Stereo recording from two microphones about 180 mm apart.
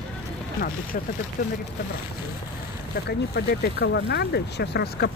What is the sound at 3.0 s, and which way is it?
Speech, 65° left (ahead or behind).